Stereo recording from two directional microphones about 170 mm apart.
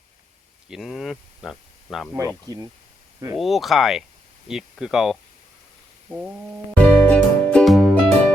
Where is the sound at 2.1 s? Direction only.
20° right (ahead or behind).